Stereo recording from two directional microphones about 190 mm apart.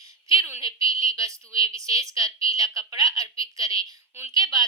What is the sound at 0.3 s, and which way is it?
A woman's voice, 15° right (ahead or behind).